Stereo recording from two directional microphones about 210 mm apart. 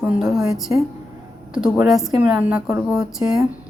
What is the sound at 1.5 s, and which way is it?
A woman's voice, 5° right (ahead or behind).